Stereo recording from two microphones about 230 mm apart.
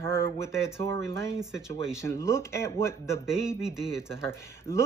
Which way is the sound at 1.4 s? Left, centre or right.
Centre.